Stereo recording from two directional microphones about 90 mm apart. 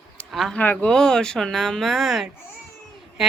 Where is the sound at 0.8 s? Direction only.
5° left (ahead or behind).